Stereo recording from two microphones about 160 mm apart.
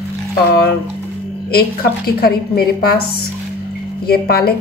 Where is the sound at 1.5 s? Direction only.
75° left (ahead or behind).